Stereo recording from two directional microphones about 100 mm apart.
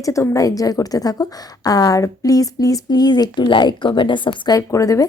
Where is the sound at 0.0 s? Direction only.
30° left (ahead or behind).